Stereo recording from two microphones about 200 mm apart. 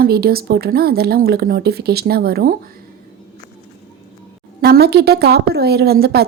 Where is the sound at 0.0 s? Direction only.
50° right (ahead or behind).